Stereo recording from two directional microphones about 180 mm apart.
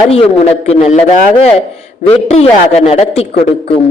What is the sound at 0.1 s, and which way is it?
A man's voice, 35° left (ahead or behind).